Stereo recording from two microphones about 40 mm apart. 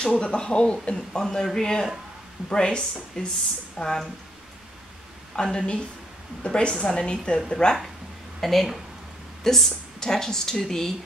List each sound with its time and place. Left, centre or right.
0.0 s a woman's voice: left
1.2 s a man's voice: centre
5.3 s a woman's voice: centre
8.4 s speech: centre